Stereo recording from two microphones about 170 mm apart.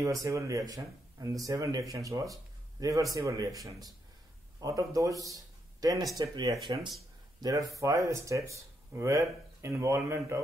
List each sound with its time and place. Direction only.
0.0 s speech: 20° right (ahead or behind)